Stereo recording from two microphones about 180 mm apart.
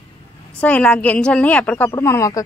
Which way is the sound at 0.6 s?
5° left (ahead or behind).